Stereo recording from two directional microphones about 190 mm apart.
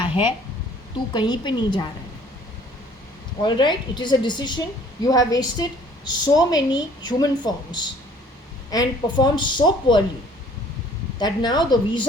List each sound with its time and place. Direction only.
0.9 s a woman's voice: 25° left (ahead or behind)
3.4 s a woman's voice: 25° left (ahead or behind)
11.2 s a woman's voice: 20° left (ahead or behind)